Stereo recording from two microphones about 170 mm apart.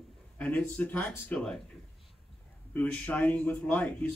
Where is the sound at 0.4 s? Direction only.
10° left (ahead or behind).